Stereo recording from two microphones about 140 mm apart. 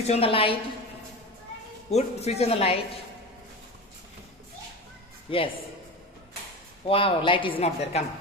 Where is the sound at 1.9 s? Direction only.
50° left (ahead or behind).